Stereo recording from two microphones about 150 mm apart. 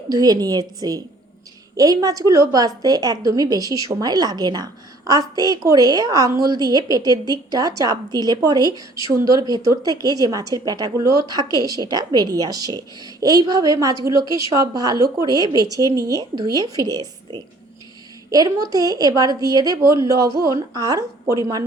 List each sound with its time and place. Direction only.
0.1 s a woman's voice: 25° right (ahead or behind)